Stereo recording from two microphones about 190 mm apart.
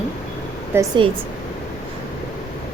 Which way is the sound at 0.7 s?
10° right (ahead or behind).